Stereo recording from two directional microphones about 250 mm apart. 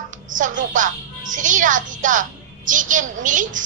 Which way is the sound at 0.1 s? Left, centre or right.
Right.